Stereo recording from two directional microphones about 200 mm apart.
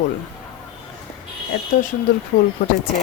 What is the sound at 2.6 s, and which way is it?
Speech, 45° left (ahead or behind).